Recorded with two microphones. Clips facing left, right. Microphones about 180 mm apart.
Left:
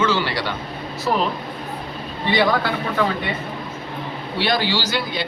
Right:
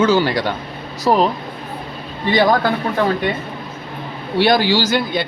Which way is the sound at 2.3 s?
45° right (ahead or behind).